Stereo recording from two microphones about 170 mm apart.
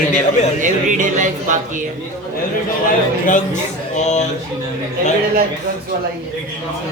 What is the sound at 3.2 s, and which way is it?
A man's voice, 45° left (ahead or behind).